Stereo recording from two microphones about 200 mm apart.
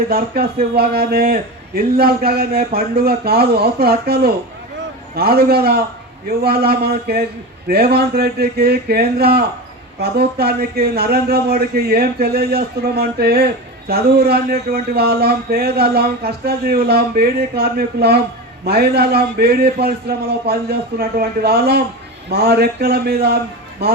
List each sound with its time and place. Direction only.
0.4 s a man's voice: 50° right (ahead or behind)